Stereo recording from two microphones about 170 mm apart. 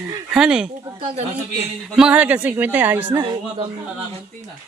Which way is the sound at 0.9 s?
35° right (ahead or behind).